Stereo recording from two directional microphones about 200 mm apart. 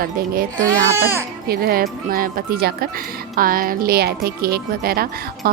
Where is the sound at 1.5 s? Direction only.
50° right (ahead or behind).